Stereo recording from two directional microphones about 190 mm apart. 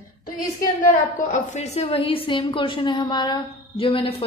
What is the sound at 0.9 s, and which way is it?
A woman's voice, 40° left (ahead or behind).